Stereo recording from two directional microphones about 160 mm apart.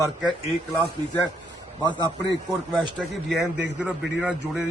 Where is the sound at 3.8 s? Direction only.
10° right (ahead or behind).